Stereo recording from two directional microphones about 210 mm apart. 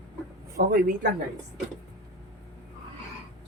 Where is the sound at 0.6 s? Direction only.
40° right (ahead or behind).